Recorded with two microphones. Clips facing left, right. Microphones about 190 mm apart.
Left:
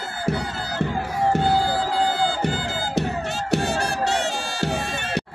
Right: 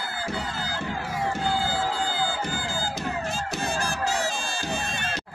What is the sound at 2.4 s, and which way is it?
Music, 65° left (ahead or behind).